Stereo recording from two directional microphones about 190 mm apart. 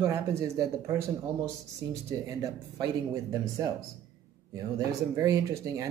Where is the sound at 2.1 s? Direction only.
15° right (ahead or behind).